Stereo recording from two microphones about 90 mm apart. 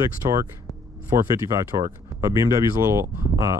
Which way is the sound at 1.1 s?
35° right (ahead or behind).